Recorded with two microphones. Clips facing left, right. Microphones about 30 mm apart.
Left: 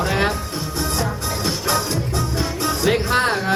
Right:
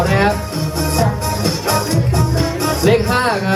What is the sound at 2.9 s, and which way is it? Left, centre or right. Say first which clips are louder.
Music: right 4 dB; centre.